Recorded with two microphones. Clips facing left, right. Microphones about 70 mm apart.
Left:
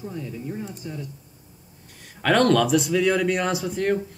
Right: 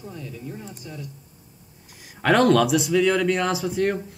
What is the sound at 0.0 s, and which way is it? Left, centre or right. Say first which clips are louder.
Speech: left 3 dB; centre.